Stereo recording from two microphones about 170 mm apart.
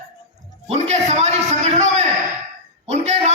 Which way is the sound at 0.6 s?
40° right (ahead or behind).